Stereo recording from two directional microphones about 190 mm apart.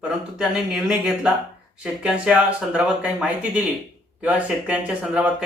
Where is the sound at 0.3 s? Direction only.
5° right (ahead or behind).